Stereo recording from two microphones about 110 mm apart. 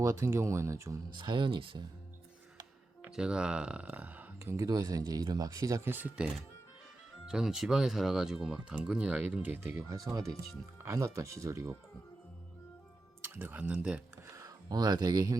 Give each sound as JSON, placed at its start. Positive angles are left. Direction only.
{"t": 0.0, "sound": "speech", "side_deg": -25}
{"t": 1.1, "sound": "speech", "side_deg": -45}
{"t": 3.0, "sound": "speech", "side_deg": -10}
{"t": 4.5, "sound": "speech", "side_deg": -35}
{"t": 7.3, "sound": "speech", "side_deg": -5}
{"t": 9.7, "sound": "speech", "side_deg": -30}
{"t": 13.2, "sound": "speech", "side_deg": -20}
{"t": 14.3, "sound": "a sound", "side_deg": -25}
{"t": 14.7, "sound": "speech", "side_deg": -40}